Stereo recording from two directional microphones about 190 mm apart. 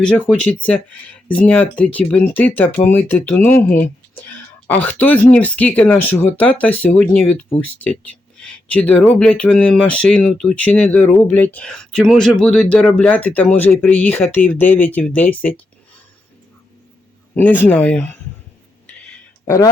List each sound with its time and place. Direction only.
0.0 s speech: 5° left (ahead or behind)
17.3 s speech: 10° left (ahead or behind)
19.5 s speech: 15° left (ahead or behind)